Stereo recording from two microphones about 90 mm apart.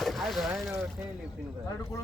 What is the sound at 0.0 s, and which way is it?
Speech, centre (ahead or behind).